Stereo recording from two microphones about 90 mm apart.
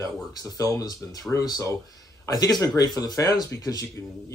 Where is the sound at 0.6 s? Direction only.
45° left (ahead or behind).